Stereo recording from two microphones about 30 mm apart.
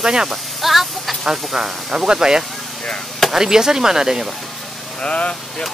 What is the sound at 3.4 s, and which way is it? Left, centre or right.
Speech, right.